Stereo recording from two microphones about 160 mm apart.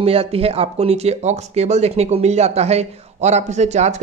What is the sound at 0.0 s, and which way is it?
Speech, 40° right (ahead or behind).